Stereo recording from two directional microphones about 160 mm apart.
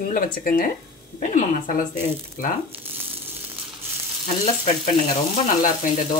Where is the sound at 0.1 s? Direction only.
60° left (ahead or behind).